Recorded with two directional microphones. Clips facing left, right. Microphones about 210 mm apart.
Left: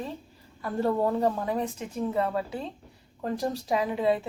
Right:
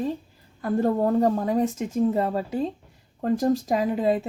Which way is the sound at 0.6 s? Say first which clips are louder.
Right 4 dB; 45° right (ahead or behind).